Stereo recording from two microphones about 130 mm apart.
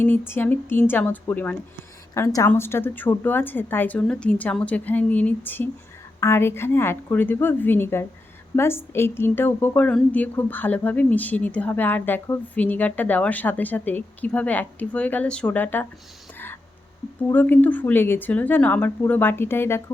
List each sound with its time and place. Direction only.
0.0 s a woman's voice: 15° left (ahead or behind)
17.3 s a woman's voice: 15° left (ahead or behind)